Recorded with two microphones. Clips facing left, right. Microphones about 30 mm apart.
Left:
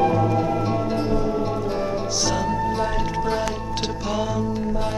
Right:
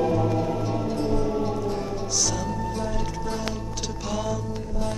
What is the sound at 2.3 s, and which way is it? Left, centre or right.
Music, left.